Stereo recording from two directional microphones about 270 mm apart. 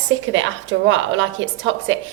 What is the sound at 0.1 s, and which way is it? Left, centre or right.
Speech, right.